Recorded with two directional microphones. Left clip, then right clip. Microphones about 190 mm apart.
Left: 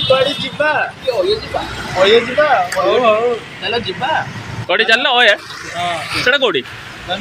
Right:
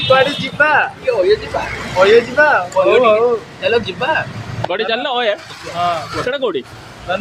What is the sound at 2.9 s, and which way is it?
Speech, 30° right (ahead or behind).